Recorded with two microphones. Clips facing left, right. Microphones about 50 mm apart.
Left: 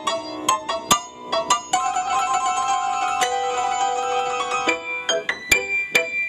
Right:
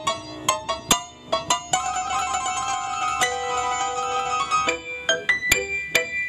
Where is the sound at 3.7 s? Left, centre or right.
Left.